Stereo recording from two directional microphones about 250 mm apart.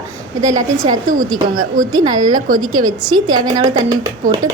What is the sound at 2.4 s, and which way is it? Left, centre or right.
Speech, right.